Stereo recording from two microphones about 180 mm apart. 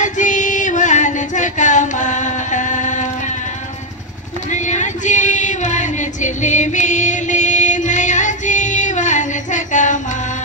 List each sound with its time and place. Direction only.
0.0 s female singing: 45° left (ahead or behind)
4.5 s female singing: 40° left (ahead or behind)